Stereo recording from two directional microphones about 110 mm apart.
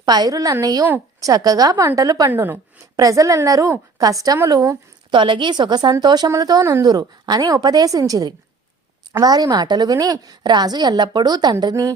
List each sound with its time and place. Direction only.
0.0 s a woman's voice: 35° right (ahead or behind)
2.3 s a woman's voice: 20° right (ahead or behind)
2.9 s a woman's voice: 30° right (ahead or behind)
5.1 s a woman's voice: 45° right (ahead or behind)